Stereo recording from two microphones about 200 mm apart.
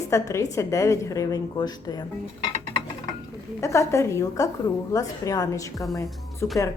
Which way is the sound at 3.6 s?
15° left (ahead or behind).